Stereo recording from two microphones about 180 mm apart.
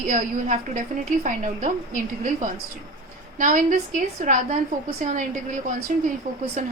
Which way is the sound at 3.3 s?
45° right (ahead or behind).